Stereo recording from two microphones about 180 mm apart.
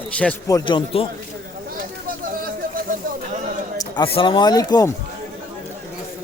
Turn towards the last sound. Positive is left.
turn(degrees=20)  # may be behind; listen again after turning